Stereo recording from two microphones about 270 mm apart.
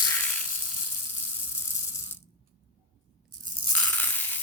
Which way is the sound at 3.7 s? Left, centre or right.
Centre.